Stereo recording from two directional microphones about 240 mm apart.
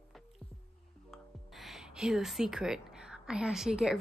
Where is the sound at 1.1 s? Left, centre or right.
Centre.